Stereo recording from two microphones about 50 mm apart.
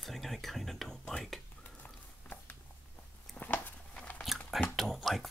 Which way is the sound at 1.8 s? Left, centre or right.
Left.